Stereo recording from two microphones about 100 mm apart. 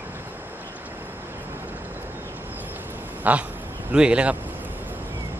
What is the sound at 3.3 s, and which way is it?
Speech, 15° right (ahead or behind).